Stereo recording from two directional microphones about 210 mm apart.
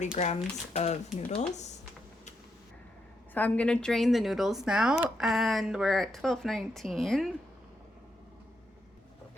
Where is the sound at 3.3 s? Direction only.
10° left (ahead or behind).